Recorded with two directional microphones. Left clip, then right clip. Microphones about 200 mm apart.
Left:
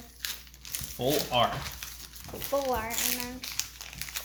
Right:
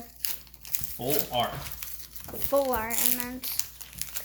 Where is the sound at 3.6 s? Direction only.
10° right (ahead or behind).